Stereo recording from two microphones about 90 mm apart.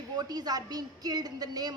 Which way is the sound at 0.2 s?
50° right (ahead or behind).